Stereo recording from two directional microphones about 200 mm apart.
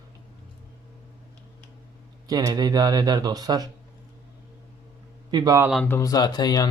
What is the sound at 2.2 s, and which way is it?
Speech, 20° right (ahead or behind).